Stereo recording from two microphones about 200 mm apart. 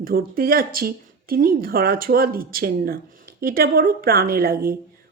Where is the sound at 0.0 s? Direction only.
50° right (ahead or behind).